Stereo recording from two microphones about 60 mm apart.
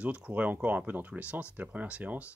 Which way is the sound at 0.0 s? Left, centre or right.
Right.